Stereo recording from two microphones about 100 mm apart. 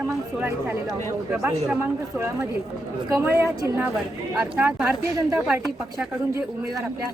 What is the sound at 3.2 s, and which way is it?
Speech, 25° right (ahead or behind).